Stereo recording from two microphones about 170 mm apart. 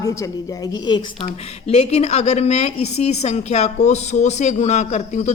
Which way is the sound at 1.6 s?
40° left (ahead or behind).